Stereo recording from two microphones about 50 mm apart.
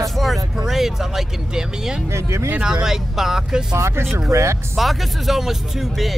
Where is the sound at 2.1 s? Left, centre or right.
Right.